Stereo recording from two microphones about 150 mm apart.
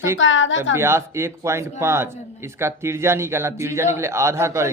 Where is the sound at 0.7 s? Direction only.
15° right (ahead or behind).